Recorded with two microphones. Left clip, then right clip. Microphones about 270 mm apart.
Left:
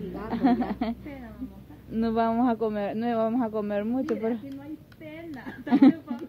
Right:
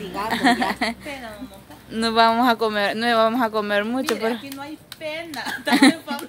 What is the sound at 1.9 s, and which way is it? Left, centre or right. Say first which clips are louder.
Speech: right 9 dB; centre.